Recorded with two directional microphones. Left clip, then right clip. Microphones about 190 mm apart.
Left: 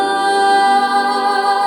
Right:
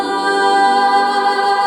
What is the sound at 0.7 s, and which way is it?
Music, 15° left (ahead or behind).